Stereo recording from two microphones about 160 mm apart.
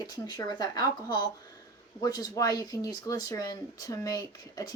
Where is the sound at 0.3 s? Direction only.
25° left (ahead or behind).